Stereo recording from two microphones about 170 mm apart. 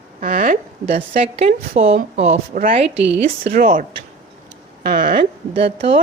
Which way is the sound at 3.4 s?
60° right (ahead or behind).